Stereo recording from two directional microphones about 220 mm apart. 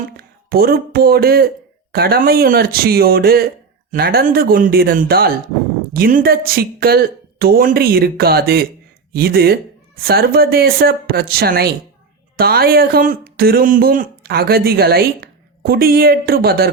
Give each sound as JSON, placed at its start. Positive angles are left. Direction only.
{"t": 0.2, "sound": "speech", "side_deg": -45}